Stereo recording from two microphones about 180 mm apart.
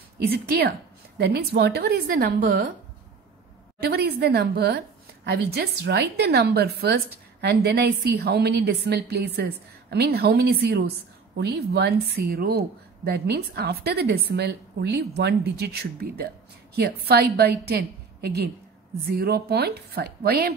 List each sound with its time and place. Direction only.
0.5 s a woman's voice: 60° right (ahead or behind)
3.9 s a woman's voice: 60° right (ahead or behind)